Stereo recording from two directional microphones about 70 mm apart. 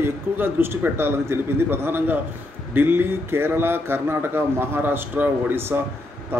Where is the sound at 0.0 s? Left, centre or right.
Right.